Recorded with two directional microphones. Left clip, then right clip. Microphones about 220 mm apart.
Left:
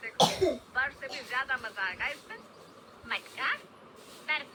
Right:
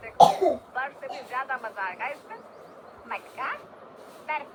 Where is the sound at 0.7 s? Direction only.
30° left (ahead or behind).